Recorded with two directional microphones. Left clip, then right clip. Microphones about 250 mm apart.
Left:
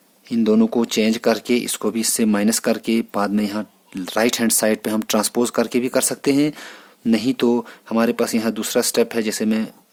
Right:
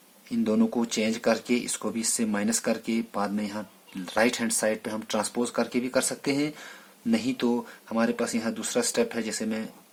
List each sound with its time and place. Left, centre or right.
0.3 s speech: left